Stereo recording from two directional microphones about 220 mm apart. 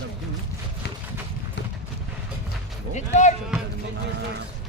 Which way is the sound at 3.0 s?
35° left (ahead or behind).